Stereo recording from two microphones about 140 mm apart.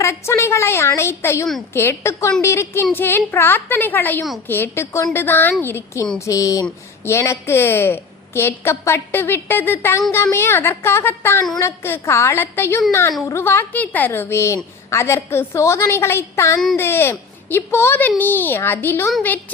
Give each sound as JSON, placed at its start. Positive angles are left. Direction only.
{"t": 0.0, "sound": "a woman's voice", "side_deg": 20}